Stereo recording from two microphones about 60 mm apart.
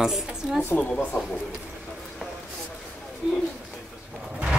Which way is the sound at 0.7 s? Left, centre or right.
Centre.